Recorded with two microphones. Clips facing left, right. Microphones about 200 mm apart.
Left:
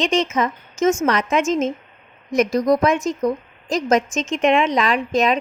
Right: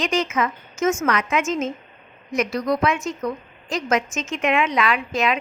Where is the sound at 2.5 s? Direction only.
45° left (ahead or behind).